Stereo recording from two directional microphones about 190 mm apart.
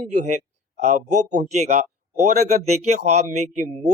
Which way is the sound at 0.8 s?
40° right (ahead or behind).